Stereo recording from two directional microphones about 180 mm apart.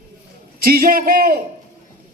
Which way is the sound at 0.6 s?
55° right (ahead or behind).